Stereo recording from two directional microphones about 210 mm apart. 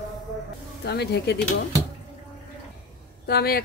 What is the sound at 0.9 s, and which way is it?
Speech, 55° left (ahead or behind).